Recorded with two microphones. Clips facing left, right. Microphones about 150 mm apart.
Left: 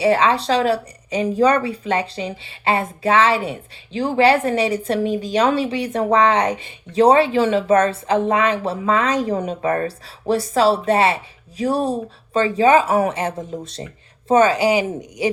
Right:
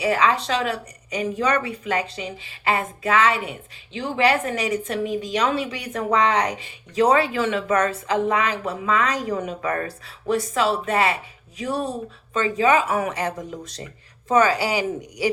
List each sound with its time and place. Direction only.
0.0 s speech: 30° left (ahead or behind)